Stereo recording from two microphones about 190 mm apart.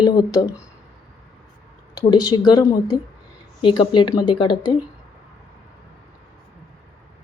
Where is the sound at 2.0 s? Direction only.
20° left (ahead or behind).